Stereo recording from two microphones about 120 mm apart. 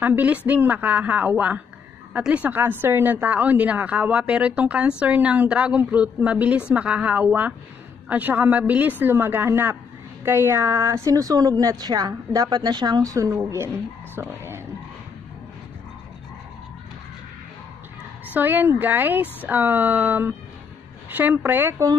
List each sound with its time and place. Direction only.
0.0 s a woman's voice: 15° right (ahead or behind)
14.1 s a sound: 20° right (ahead or behind)
18.3 s a woman's voice: 15° right (ahead or behind)